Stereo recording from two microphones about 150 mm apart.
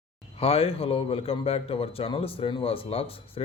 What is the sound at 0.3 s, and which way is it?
A man's voice, 40° left (ahead or behind).